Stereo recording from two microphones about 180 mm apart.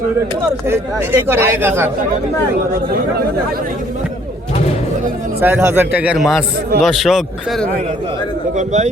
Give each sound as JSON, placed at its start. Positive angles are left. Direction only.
{"t": 0.7, "sound": "speech", "side_deg": -15}
{"t": 5.4, "sound": "speech", "side_deg": -10}
{"t": 8.5, "sound": "a man's voice", "side_deg": -40}